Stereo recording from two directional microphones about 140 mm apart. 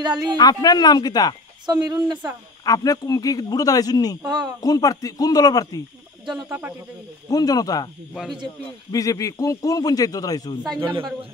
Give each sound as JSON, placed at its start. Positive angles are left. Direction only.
{"t": 0.0, "sound": "speech", "side_deg": -30}
{"t": 0.4, "sound": "a man's voice", "side_deg": 30}
{"t": 1.7, "sound": "speech", "side_deg": -25}
{"t": 2.6, "sound": "a man's voice", "side_deg": 25}
{"t": 4.2, "sound": "speech", "side_deg": -30}
{"t": 4.6, "sound": "a man's voice", "side_deg": 25}
{"t": 7.2, "sound": "a man's voice", "side_deg": 25}
{"t": 8.1, "sound": "speech", "side_deg": 0}
{"t": 8.9, "sound": "a man's voice", "side_deg": 25}
{"t": 10.8, "sound": "a man's voice", "side_deg": -35}